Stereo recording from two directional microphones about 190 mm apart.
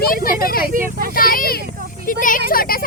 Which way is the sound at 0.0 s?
50° left (ahead or behind).